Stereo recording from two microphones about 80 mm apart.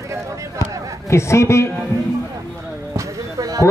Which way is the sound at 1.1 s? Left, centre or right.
Left.